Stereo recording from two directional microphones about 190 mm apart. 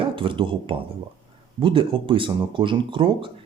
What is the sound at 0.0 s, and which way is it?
Speech, 25° right (ahead or behind).